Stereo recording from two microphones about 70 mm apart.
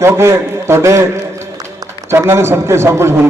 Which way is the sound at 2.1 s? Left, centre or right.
Right.